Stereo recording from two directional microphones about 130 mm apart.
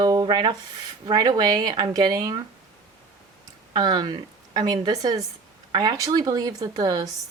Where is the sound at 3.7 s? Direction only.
35° right (ahead or behind).